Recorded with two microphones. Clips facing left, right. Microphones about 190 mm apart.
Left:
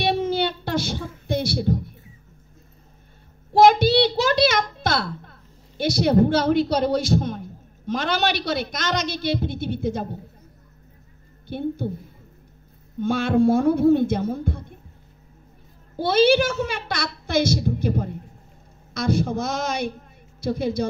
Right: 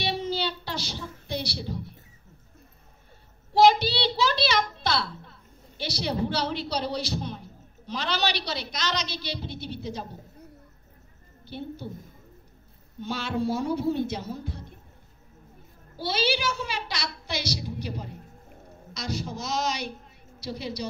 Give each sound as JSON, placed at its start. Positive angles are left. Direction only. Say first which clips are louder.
{"t": 0.0, "sound": "music", "louder": "left 7 dB", "side_deg": 55}
{"t": 3.5, "sound": "a sound", "louder": "left 5 dB", "side_deg": 50}
{"t": 11.4, "sound": "a woman's voice", "louder": "left 9 dB", "side_deg": 50}
{"t": 13.0, "sound": "a woman's voice", "louder": "left 10 dB", "side_deg": 50}
{"t": 16.0, "sound": "a woman's voice", "louder": "left 11 dB", "side_deg": 50}